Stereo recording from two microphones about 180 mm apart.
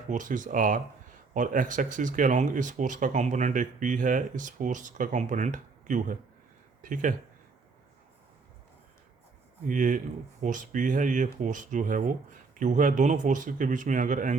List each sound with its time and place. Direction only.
0.1 s speech: 45° right (ahead or behind)
9.6 s speech: 45° right (ahead or behind)